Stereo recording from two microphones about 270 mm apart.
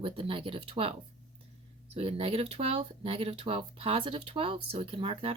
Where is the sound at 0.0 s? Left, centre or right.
Centre.